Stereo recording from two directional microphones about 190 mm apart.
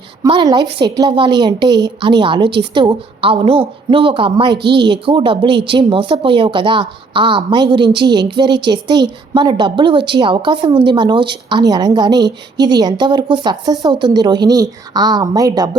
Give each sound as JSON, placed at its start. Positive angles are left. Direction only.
{"t": 0.2, "sound": "speech", "side_deg": -20}
{"t": 4.6, "sound": "speech", "side_deg": -60}
{"t": 4.9, "sound": "speech", "side_deg": -25}